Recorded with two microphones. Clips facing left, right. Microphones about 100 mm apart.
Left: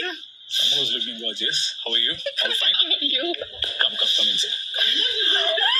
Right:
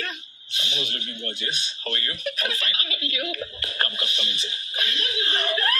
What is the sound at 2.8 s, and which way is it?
Speech, 70° right (ahead or behind).